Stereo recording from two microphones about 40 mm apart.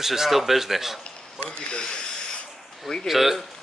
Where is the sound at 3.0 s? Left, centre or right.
Centre.